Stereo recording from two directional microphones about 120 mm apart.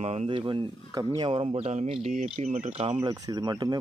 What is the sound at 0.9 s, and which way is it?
Speech, 30° right (ahead or behind).